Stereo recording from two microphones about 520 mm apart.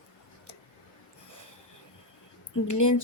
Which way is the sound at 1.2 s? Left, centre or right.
Left.